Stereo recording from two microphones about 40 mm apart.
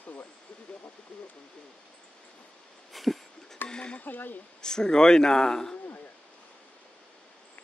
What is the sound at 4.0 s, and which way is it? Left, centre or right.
Speech, left.